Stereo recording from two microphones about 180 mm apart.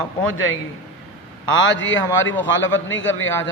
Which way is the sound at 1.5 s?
90° left.